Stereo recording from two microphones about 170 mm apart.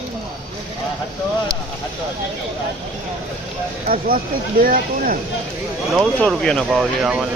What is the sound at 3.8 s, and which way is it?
Speech, 55° right (ahead or behind).